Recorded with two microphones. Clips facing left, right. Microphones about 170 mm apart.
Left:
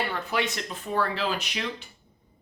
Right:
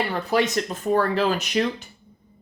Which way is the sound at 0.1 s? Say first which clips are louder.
Right 7 dB; 40° right (ahead or behind).